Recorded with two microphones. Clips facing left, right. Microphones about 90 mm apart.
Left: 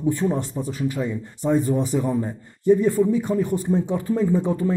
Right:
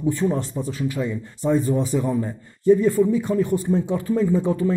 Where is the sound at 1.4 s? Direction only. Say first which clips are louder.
Even; 55° left (ahead or behind).